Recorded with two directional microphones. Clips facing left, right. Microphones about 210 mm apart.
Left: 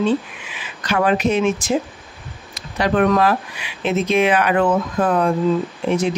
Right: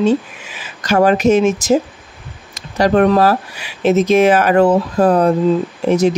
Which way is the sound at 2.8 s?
40° right (ahead or behind).